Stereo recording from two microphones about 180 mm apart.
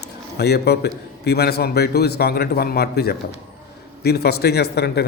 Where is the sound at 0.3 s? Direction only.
65° left (ahead or behind).